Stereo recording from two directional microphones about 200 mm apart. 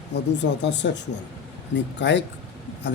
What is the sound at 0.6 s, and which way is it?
A man's voice, 60° left (ahead or behind).